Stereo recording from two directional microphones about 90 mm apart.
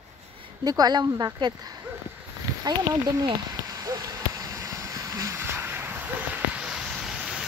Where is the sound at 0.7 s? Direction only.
50° right (ahead or behind).